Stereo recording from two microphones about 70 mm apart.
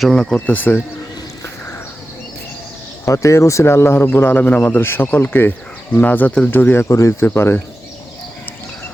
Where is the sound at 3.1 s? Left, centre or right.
Left.